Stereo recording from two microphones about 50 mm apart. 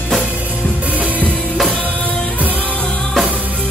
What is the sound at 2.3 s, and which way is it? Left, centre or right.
Music, right.